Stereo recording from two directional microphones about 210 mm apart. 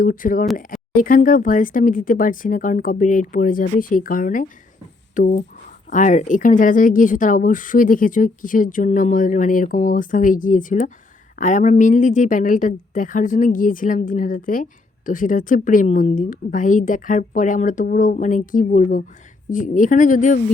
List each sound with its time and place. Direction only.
0.0 s a woman's voice: 40° left (ahead or behind)